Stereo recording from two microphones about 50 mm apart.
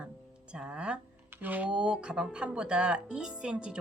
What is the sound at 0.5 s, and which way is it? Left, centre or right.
Speech, right.